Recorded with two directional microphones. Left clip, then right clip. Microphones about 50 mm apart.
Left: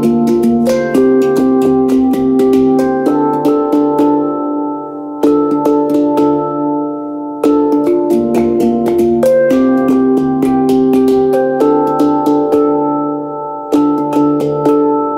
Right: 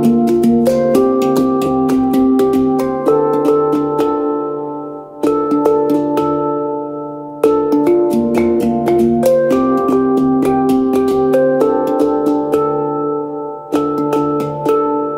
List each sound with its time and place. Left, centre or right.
0.0 s music: right
5.2 s music: right
7.4 s music: right
13.7 s music: right